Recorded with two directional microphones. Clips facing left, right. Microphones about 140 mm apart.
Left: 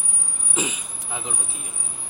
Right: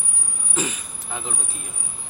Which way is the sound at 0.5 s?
20° left (ahead or behind).